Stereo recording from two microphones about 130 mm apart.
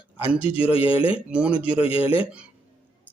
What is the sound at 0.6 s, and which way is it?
Speech, 45° left (ahead or behind).